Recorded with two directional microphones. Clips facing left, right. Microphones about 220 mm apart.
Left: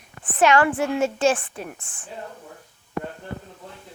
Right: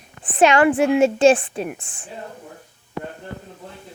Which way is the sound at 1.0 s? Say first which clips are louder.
Right 6 dB; 30° right (ahead or behind).